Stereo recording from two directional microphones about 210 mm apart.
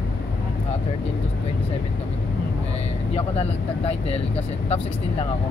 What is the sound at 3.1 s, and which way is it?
Speech, 30° left (ahead or behind).